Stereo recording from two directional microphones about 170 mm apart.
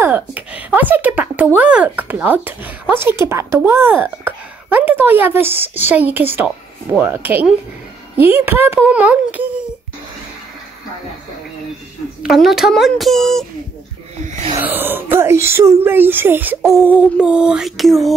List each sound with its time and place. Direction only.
0.0 s speech: 10° right (ahead or behind)
12.2 s speech: centre (ahead or behind)
14.2 s a sound: 45° right (ahead or behind)
14.6 s speech: 10° right (ahead or behind)